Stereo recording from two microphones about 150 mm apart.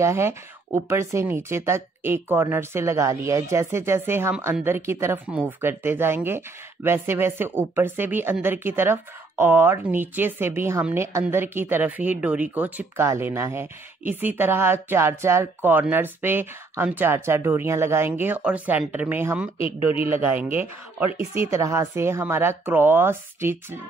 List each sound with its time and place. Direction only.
0.0 s speech: 15° right (ahead or behind)